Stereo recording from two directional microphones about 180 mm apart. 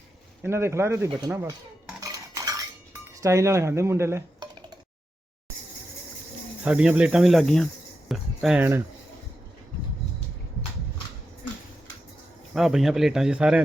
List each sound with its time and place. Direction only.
0.4 s cutlery: 15° right (ahead or behind)
6.7 s speech: 5° right (ahead or behind)
12.5 s speech: centre (ahead or behind)